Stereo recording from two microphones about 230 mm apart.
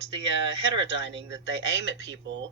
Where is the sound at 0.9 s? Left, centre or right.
Right.